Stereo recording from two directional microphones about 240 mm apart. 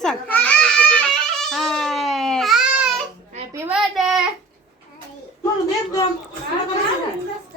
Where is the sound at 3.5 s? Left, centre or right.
Centre.